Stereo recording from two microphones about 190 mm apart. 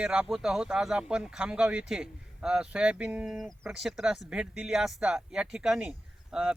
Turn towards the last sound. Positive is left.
turn(degrees=-5)  # may be behind; listen again after turning